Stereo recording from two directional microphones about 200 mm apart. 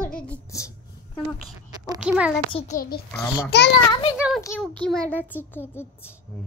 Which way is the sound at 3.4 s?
60° left (ahead or behind).